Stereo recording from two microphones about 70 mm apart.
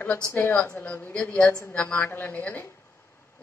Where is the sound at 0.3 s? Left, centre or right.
Left.